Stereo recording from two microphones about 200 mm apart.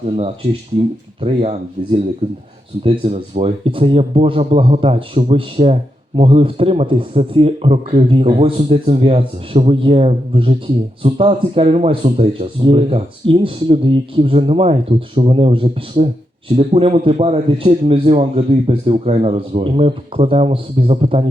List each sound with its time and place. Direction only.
1.2 s speech: 30° right (ahead or behind)
2.8 s speech: 30° right (ahead or behind)